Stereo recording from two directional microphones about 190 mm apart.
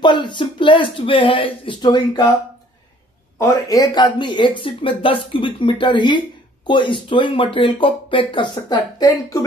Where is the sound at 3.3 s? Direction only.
15° left (ahead or behind).